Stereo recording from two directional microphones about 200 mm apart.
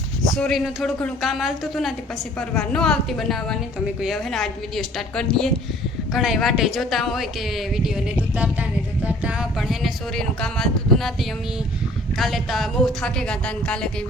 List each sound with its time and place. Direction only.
0.3 s a woman's voice: centre (ahead or behind)